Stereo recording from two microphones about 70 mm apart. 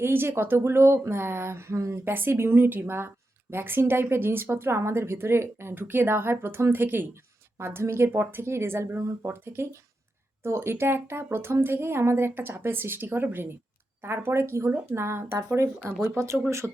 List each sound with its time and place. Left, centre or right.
0.0 s speech: right
16.0 s speech: right